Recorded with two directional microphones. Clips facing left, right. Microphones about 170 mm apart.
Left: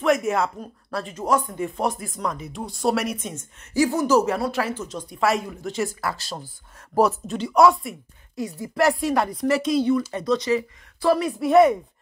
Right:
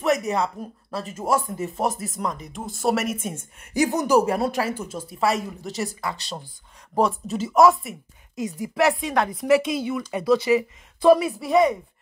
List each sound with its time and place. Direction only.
0.0 s a woman's voice: centre (ahead or behind); by 4.2 s 20° right (ahead or behind)
4.6 s a woman's voice: 10° right (ahead or behind)
8.4 s speech: 20° right (ahead or behind)
8.7 s a woman's voice: centre (ahead or behind)